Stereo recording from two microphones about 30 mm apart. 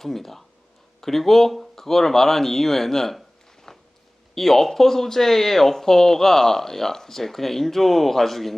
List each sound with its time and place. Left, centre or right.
0.0 s speech: centre
3.7 s a sound: centre
4.4 s speech: centre